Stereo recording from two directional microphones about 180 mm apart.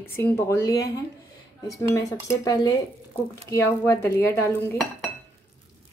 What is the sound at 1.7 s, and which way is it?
Speech, 15° left (ahead or behind).